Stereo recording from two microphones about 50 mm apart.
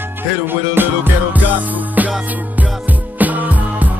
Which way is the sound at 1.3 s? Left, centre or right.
Right.